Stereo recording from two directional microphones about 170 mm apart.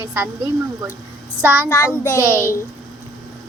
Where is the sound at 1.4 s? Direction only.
10° right (ahead or behind).